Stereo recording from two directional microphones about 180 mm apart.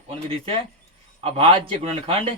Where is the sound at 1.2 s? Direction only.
30° right (ahead or behind).